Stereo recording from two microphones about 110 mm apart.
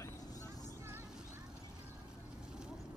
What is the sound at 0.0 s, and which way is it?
Vehicle, 25° left (ahead or behind).